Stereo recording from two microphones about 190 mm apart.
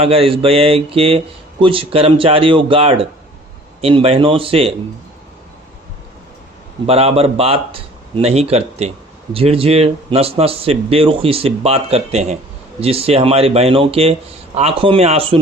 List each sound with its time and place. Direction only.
0.0 s speech: 30° right (ahead or behind)
6.9 s speech: 30° right (ahead or behind)